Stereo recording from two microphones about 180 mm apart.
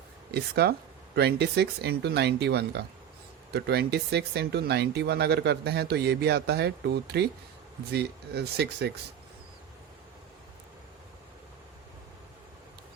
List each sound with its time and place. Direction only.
0.3 s speech: 65° right (ahead or behind)